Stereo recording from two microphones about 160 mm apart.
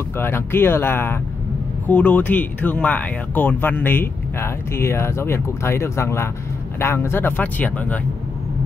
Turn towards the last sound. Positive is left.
turn(degrees=10)  # may be behind; listen again after turning